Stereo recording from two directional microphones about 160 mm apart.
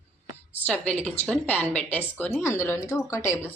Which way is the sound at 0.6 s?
10° left (ahead or behind).